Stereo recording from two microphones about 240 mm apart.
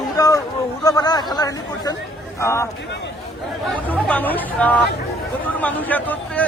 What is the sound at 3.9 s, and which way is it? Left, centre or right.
Speech, centre.